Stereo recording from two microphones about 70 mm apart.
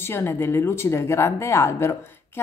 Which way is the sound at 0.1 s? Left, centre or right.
Left.